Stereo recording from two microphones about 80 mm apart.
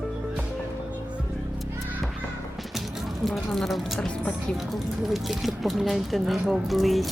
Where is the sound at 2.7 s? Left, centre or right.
Centre.